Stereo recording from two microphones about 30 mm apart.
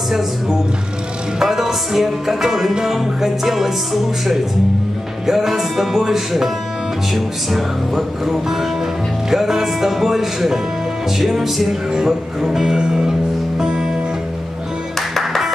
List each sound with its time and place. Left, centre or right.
1.4 s music: centre
15.0 s music: centre